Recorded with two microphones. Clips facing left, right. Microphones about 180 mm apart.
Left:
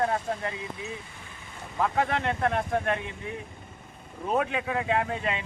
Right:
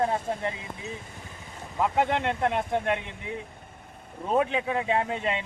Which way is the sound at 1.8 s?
20° right (ahead or behind).